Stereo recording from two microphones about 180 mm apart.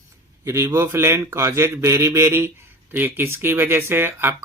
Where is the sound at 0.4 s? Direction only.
15° right (ahead or behind).